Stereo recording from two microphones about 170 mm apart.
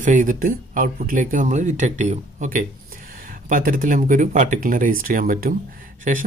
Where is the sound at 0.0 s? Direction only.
50° right (ahead or behind).